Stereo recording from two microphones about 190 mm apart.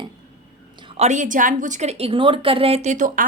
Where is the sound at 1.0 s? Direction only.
40° right (ahead or behind).